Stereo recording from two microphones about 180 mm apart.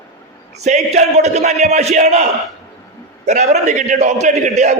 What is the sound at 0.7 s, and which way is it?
A man's voice, 40° right (ahead or behind).